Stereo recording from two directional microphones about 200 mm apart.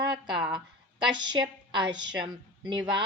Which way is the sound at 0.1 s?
25° right (ahead or behind).